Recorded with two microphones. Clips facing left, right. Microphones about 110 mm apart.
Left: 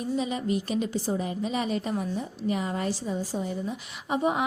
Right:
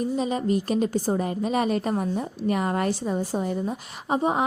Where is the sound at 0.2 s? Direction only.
40° right (ahead or behind); by 3.8 s 55° right (ahead or behind).